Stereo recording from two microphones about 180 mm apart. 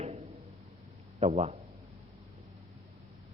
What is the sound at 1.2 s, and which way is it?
Speech, 35° right (ahead or behind).